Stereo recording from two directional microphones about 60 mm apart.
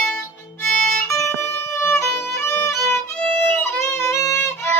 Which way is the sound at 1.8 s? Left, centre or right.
Left.